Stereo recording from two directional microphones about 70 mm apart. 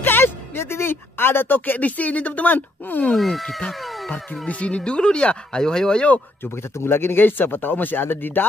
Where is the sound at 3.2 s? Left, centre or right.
Centre.